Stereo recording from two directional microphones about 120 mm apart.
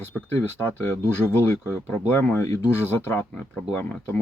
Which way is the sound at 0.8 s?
20° left (ahead or behind).